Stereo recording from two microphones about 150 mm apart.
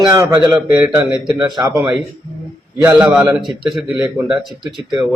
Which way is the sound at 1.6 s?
25° right (ahead or behind).